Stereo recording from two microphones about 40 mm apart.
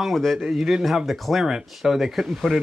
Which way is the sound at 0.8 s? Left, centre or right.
Centre.